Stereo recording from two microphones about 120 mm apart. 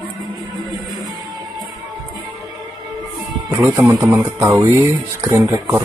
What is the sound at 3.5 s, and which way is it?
Speech, 25° right (ahead or behind).